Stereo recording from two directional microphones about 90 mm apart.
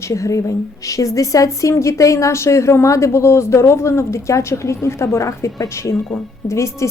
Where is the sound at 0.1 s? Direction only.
35° left (ahead or behind).